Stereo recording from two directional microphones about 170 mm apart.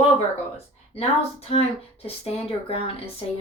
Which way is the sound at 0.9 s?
35° left (ahead or behind).